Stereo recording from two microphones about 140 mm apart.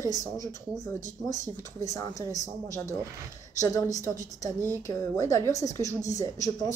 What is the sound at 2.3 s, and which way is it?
Speech, 25° left (ahead or behind).